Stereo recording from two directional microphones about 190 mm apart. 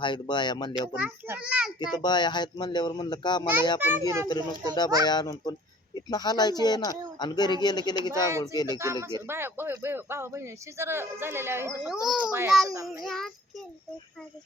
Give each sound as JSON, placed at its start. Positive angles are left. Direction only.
{"t": 0.0, "sound": "speech", "side_deg": 25}
{"t": 0.8, "sound": "speech", "side_deg": -10}
{"t": 1.8, "sound": "speech", "side_deg": 20}
{"t": 3.8, "sound": "speech", "side_deg": -10}
{"t": 4.3, "sound": "speech", "side_deg": 20}
{"t": 8.8, "sound": "a child's voice", "side_deg": -15}
{"t": 12.6, "sound": "speech", "side_deg": -15}
{"t": 13.0, "sound": "a child's voice", "side_deg": 0}